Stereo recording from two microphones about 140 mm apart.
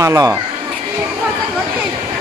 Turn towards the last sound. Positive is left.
turn(degrees=-25)  # may be behind; listen again after turning